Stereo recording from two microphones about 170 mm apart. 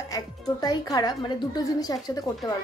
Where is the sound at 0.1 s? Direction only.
20° left (ahead or behind).